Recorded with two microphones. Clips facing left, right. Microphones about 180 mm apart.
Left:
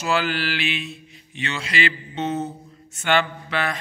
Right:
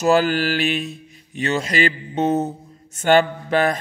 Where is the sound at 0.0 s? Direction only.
45° right (ahead or behind).